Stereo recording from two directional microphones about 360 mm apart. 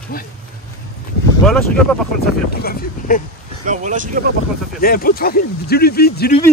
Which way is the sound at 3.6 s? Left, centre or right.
Right.